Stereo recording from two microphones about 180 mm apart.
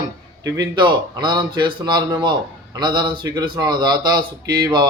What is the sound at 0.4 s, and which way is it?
A man's voice, 20° right (ahead or behind).